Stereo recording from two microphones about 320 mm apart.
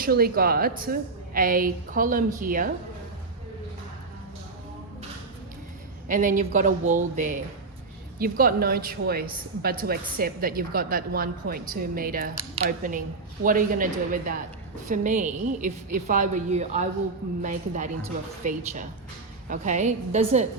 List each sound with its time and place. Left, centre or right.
0.0 s a woman's voice: right
6.1 s a woman's voice: right